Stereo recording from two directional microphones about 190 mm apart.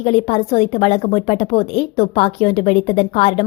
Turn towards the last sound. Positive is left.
turn(degrees=30)  # may be behind; listen again after turning